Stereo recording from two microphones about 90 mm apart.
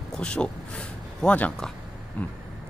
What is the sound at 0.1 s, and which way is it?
Speech, 10° left (ahead or behind).